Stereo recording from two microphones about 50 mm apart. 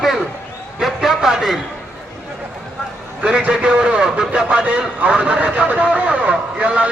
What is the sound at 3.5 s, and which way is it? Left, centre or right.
A man's voice, right.